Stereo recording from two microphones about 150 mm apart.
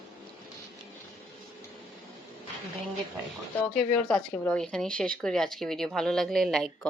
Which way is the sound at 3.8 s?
5° left (ahead or behind).